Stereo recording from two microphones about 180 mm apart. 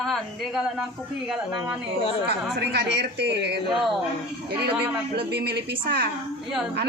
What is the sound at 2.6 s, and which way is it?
A woman's voice, 70° right (ahead or behind).